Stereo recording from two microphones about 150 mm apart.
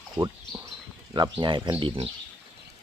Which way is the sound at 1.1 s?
30° right (ahead or behind).